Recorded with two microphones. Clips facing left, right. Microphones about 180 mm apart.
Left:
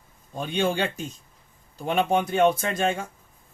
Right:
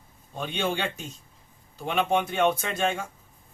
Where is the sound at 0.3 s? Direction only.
40° left (ahead or behind).